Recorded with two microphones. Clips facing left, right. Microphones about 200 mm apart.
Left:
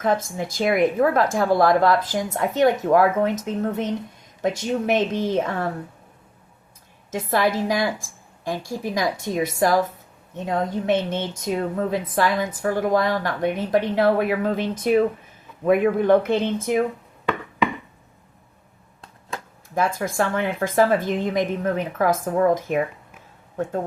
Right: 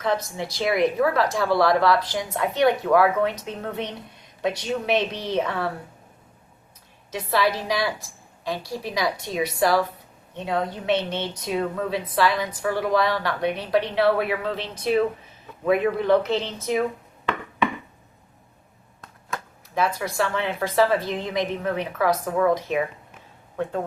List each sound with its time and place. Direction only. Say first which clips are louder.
0.0 s speech: left 3 dB; 50° left (ahead or behind)
7.1 s speech: left 2 dB; 50° left (ahead or behind)
19.7 s speech: left 2 dB; 50° left (ahead or behind)